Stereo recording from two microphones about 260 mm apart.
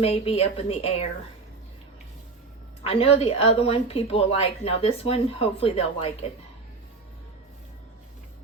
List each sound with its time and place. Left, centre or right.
0.0 s a woman's voice: left
2.8 s a woman's voice: left